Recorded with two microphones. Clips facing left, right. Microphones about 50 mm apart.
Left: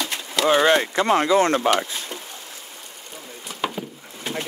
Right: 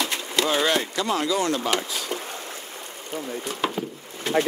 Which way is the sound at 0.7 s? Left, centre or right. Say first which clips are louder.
Left 5 dB; left.